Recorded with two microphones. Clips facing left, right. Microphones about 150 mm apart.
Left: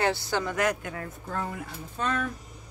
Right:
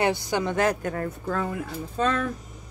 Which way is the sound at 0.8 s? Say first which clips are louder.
Right 8 dB; 45° right (ahead or behind).